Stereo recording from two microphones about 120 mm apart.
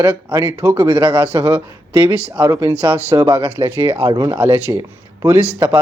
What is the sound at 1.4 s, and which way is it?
Speech, 15° right (ahead or behind).